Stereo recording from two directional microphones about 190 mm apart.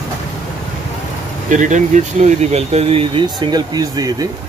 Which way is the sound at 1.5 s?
40° right (ahead or behind).